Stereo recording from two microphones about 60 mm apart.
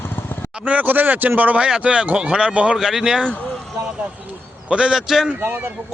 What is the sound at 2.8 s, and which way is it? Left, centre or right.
Speech, centre.